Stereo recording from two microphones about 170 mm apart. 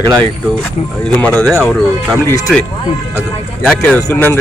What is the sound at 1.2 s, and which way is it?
Speech, 5° left (ahead or behind).